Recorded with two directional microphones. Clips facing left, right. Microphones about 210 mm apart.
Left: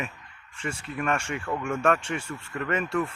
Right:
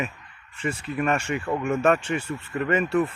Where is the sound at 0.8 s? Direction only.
5° right (ahead or behind).